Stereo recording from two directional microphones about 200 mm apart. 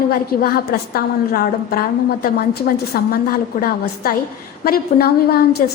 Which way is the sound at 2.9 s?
45° left (ahead or behind).